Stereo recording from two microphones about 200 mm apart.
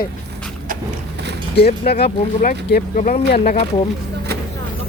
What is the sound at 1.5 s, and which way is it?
Speech, 55° left (ahead or behind).